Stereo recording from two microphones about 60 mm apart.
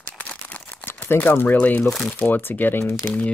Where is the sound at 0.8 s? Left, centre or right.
Left.